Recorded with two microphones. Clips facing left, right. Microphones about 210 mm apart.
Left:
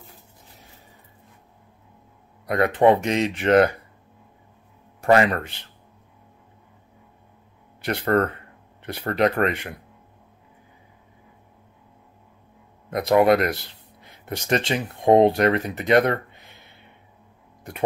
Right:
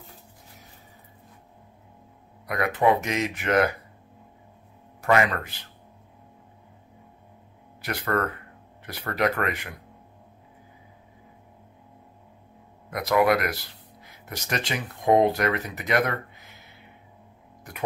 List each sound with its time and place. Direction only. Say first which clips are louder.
2.4 s speech: left 5 dB; 30° left (ahead or behind)
5.0 s speech: left 4 dB; 30° left (ahead or behind)
7.8 s speech: left 6 dB; 30° left (ahead or behind)
12.9 s speech: left 4 dB; 25° left (ahead or behind)